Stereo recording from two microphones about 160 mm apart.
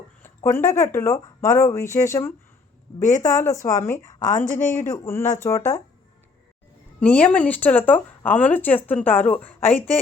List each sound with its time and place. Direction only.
0.2 s speech: 15° left (ahead or behind)
4.3 s a woman's voice: 55° left (ahead or behind)
5.0 s speech: 15° left (ahead or behind)
7.0 s speech: 10° left (ahead or behind)